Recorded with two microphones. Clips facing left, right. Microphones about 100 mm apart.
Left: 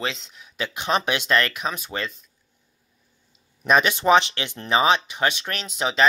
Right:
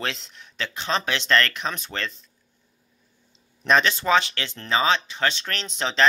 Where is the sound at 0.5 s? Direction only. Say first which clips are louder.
Left 3 dB; 15° left (ahead or behind).